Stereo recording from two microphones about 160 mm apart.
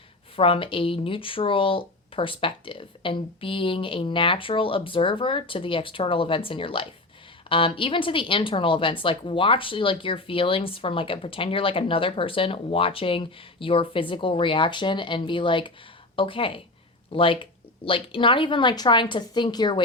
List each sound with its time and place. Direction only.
0.3 s a woman's voice: 35° left (ahead or behind)